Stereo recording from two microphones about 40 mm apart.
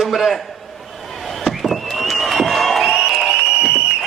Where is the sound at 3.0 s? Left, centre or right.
Centre.